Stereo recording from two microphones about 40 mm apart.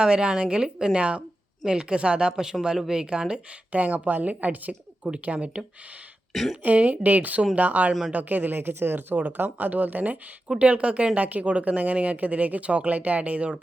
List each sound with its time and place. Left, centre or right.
0.0 s a woman's voice: right
3.7 s speech: right
5.0 s a woman's voice: right
9.1 s speech: right
10.5 s speech: right